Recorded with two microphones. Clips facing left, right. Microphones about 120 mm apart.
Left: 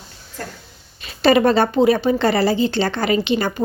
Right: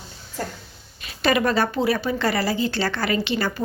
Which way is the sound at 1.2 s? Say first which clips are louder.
Left 6 dB; 30° left (ahead or behind).